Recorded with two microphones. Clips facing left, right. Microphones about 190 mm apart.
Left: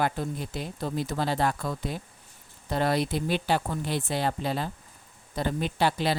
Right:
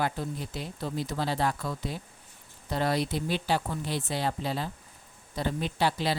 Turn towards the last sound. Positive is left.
turn(degrees=55)  # may be behind; listen again after turning